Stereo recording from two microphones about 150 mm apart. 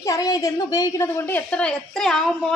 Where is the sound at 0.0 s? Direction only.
25° left (ahead or behind).